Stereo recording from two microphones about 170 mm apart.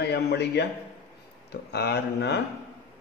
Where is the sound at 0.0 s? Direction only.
80° left.